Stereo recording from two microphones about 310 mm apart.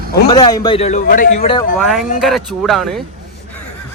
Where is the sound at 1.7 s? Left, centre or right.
Centre.